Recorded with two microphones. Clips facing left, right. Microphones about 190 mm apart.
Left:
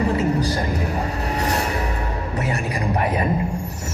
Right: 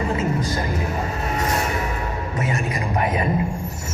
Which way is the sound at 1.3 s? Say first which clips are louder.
Even; 40° left (ahead or behind).